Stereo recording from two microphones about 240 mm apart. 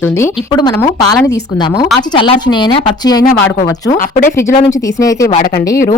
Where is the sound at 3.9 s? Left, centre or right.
Left.